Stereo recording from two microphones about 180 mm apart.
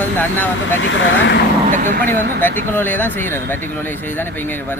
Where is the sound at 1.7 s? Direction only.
45° right (ahead or behind).